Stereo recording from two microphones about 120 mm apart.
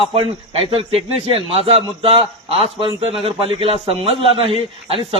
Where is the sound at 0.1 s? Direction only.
50° right (ahead or behind).